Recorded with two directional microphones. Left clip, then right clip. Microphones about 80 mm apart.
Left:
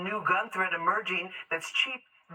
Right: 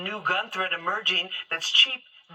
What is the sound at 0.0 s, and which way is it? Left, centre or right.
Speech, centre.